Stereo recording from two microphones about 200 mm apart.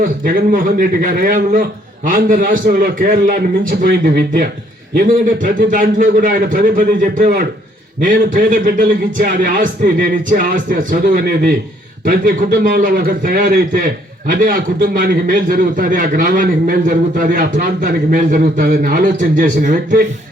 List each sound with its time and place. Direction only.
0.3 s a man's voice: 45° right (ahead or behind)